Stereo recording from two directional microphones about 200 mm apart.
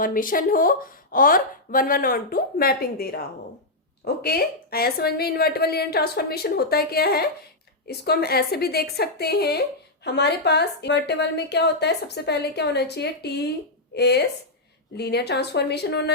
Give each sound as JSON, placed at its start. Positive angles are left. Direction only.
{"t": 0.0, "sound": "a woman's voice", "side_deg": 45}